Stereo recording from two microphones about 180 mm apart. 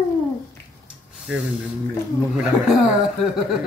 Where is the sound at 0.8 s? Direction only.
5° right (ahead or behind).